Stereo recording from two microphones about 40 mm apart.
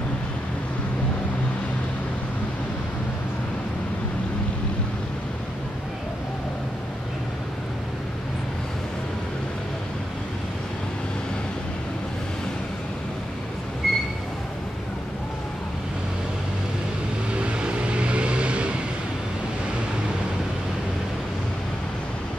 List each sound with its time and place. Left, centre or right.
13.8 s train: centre
17.4 s music: right